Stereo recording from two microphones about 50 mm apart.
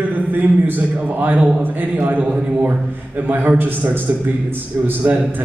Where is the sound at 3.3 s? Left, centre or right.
Right.